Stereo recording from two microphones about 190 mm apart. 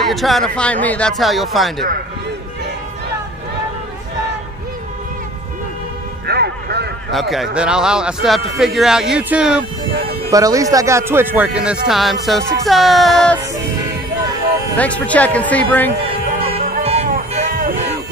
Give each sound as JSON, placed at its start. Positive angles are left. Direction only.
{"t": 0.0, "sound": "speech", "side_deg": 0}
{"t": 6.2, "sound": "music", "side_deg": -60}
{"t": 7.1, "sound": "speech", "side_deg": 0}
{"t": 10.3, "sound": "speech", "side_deg": -20}
{"t": 14.8, "sound": "speech", "side_deg": 5}
{"t": 16.3, "sound": "music", "side_deg": -30}